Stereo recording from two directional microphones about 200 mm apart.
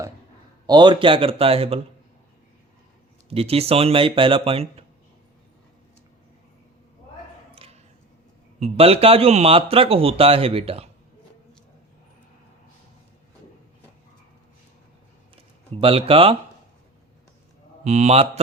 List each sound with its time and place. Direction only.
0.7 s speech: 25° right (ahead or behind)
3.2 s speech: 30° right (ahead or behind)
7.5 s a sound: 30° right (ahead or behind)
8.5 s speech: 30° right (ahead or behind)
15.8 s speech: 30° right (ahead or behind)
17.8 s a man's voice: 35° right (ahead or behind)